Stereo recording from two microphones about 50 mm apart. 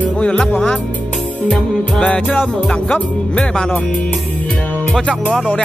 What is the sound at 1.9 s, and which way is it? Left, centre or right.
Music, left.